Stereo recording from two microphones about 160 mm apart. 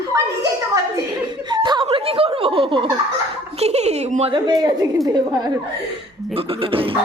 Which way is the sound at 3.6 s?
45° right (ahead or behind).